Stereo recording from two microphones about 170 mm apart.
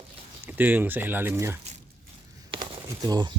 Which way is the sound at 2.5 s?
30° right (ahead or behind).